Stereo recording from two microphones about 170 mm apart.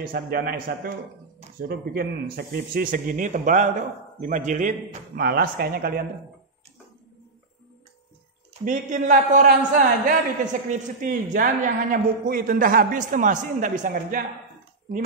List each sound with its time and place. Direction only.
0.0 s speech: 60° right (ahead or behind)
8.6 s a man's voice: 50° right (ahead or behind)